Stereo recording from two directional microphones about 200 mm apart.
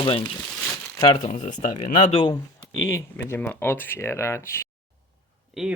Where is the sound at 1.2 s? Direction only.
40° left (ahead or behind).